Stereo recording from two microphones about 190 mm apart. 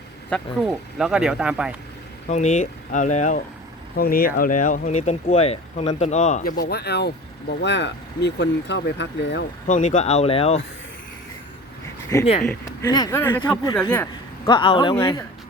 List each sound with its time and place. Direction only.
0.3 s speech: centre (ahead or behind)
2.3 s speech: 40° left (ahead or behind)
3.9 s speech: 50° left (ahead or behind); by 9.4 s 70° left (ahead or behind)
9.6 s speech: 40° left (ahead or behind)
12.2 s speech: 30° left (ahead or behind)
12.5 s speech: 20° left (ahead or behind)
13.1 s speech: 10° left (ahead or behind)
14.4 s speech: 25° left (ahead or behind)